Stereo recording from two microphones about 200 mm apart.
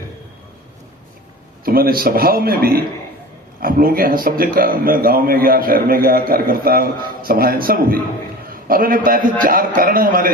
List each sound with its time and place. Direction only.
1.6 s a man's voice: 50° right (ahead or behind)